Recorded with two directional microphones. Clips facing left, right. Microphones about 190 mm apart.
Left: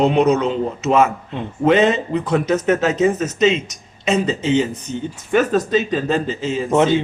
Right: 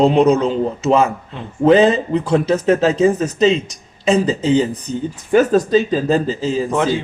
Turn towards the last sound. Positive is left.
turn(degrees=20)  # may be behind; listen again after turning